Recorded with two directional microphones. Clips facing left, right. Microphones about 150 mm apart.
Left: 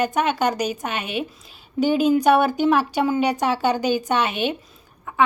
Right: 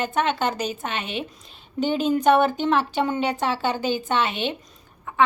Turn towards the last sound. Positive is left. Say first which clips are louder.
# left 2 dB
turn(degrees=15)  # may be behind; listen again after turning